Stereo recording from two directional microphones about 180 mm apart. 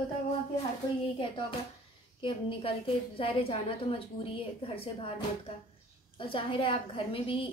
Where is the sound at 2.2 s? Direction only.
30° left (ahead or behind).